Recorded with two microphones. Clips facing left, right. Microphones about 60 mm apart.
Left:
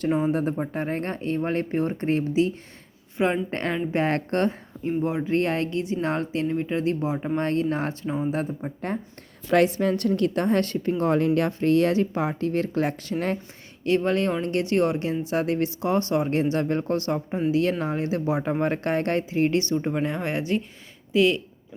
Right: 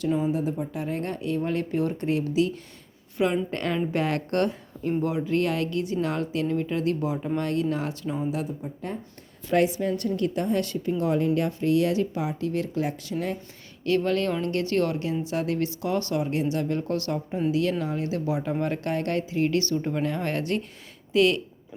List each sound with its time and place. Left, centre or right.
0.0 s speech: left
8.0 s speech: left
8.3 s speech: left
9.5 s speech: left
13.8 s speech: left
16.3 s speech: left; by 21.4 s centre